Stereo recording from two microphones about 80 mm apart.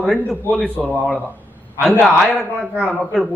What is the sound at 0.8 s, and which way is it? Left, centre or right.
Speech, centre.